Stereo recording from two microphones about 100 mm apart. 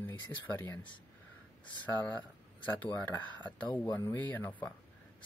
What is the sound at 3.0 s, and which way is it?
Speech, 15° left (ahead or behind).